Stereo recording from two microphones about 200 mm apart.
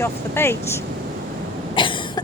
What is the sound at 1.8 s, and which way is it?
Cough, 25° left (ahead or behind).